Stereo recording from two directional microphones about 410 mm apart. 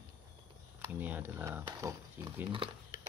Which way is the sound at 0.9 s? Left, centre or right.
Centre.